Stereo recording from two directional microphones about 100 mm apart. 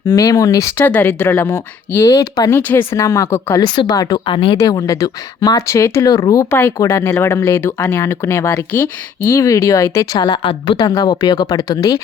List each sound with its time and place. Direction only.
0.1 s speech: 35° left (ahead or behind)
0.8 s speech: 20° left (ahead or behind); by 2.5 s 40° left (ahead or behind)
2.5 s speech: 20° left (ahead or behind)
2.9 s speech: 30° left (ahead or behind)
3.6 s speech: 50° left (ahead or behind)
3.9 s speech: 40° left (ahead or behind)
4.3 s speech: 60° left (ahead or behind)
4.5 s speech: 35° left (ahead or behind)
10.2 s speech: 50° left (ahead or behind)